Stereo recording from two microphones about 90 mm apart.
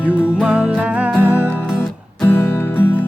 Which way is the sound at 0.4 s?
10° right (ahead or behind).